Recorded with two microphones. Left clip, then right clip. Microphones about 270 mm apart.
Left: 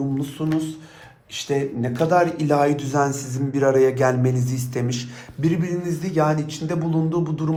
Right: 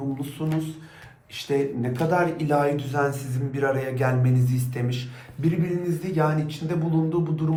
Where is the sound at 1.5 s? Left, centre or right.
Left.